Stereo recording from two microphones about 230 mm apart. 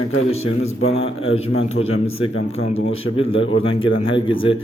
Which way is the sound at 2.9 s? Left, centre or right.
Left.